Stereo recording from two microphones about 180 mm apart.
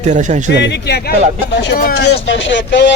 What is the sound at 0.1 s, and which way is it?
Speech, 45° right (ahead or behind).